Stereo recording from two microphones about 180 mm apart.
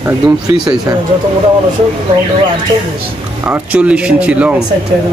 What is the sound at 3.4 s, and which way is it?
Speech, 10° right (ahead or behind).